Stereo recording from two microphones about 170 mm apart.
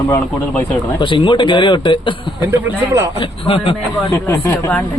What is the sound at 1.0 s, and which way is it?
A man's voice, 30° left (ahead or behind).